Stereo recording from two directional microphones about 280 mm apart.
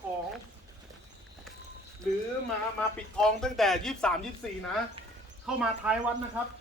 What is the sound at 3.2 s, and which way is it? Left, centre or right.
Speech, centre.